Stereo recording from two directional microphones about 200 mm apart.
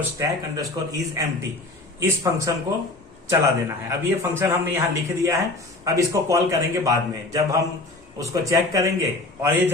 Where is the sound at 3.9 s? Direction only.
15° right (ahead or behind).